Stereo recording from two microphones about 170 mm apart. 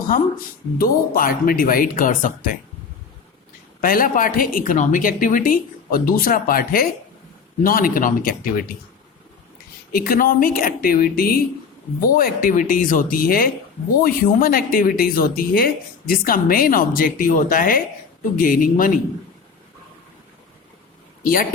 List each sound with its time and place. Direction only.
0.1 s speech: 55° left (ahead or behind)
3.8 s speech: 55° left (ahead or behind)
9.9 s speech: 60° left (ahead or behind)